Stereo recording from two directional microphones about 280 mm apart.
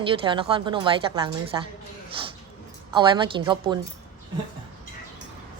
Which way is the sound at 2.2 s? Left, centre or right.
Centre.